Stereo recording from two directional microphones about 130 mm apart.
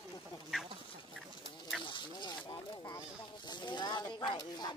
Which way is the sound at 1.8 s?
40° left (ahead or behind).